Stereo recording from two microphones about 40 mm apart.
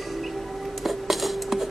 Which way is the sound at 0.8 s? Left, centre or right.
Centre.